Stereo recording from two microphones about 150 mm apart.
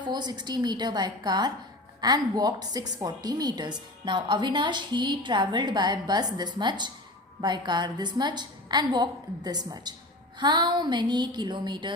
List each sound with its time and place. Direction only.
0.0 s a woman's voice: 30° right (ahead or behind)